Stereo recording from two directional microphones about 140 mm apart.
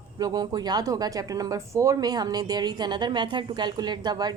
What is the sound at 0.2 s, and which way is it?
Speech, 30° right (ahead or behind).